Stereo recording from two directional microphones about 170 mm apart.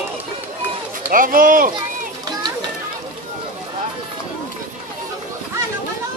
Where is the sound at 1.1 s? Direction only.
55° right (ahead or behind).